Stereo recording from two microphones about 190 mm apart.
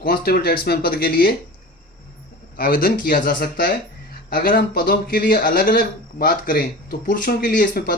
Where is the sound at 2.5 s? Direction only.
50° left (ahead or behind).